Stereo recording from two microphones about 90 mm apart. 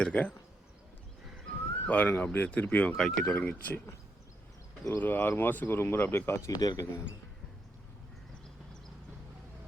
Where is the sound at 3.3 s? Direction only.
15° left (ahead or behind).